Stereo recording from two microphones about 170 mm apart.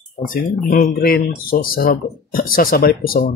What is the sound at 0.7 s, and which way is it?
Speech, 60° left (ahead or behind).